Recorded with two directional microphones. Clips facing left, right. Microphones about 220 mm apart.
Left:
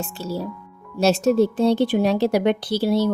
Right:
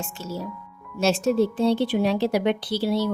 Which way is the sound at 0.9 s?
40° left (ahead or behind).